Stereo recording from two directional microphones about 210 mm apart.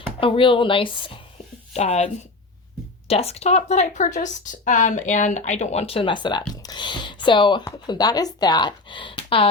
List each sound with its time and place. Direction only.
0.2 s a woman's voice: 25° left (ahead or behind)
3.1 s a woman's voice: 30° left (ahead or behind)